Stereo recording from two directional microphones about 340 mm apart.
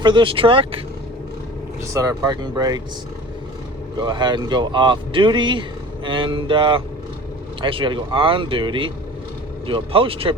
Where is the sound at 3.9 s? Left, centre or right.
Centre.